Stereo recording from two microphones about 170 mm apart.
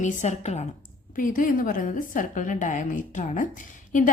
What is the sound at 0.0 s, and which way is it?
Speech, 45° left (ahead or behind).